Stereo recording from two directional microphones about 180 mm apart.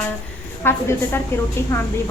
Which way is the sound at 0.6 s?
15° left (ahead or behind).